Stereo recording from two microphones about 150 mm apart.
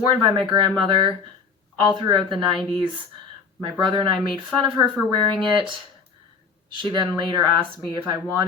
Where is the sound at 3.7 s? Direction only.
30° right (ahead or behind).